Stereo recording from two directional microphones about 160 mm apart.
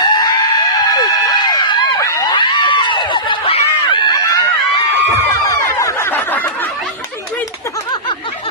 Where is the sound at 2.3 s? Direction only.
30° left (ahead or behind); by 6.7 s 10° left (ahead or behind).